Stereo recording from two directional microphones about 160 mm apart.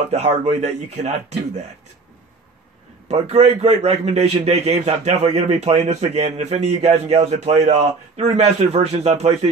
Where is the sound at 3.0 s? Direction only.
40° right (ahead or behind).